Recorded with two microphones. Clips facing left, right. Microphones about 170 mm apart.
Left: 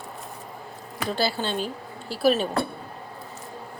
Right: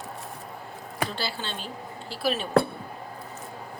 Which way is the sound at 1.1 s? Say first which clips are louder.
Left 7 dB; 45° left (ahead or behind).